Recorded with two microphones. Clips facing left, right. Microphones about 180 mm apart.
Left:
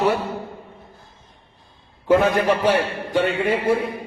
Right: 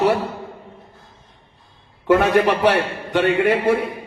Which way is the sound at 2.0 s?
70° right (ahead or behind).